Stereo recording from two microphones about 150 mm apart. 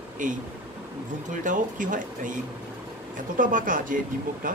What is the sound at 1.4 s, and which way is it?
Speech, 60° right (ahead or behind).